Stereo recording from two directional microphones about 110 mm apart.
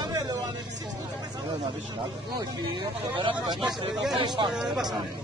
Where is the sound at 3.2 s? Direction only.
45° right (ahead or behind).